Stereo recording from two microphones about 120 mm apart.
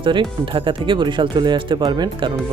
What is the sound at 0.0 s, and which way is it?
Speech, 45° right (ahead or behind).